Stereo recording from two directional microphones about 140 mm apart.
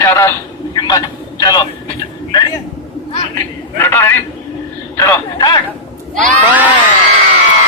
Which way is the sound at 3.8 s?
15° left (ahead or behind).